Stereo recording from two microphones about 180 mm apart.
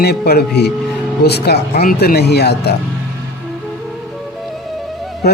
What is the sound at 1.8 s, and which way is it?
Speech, 50° left (ahead or behind).